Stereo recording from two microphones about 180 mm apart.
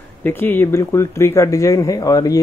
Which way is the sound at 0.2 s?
10° left (ahead or behind).